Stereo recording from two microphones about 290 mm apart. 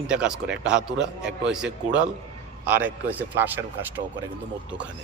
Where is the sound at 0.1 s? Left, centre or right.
Centre.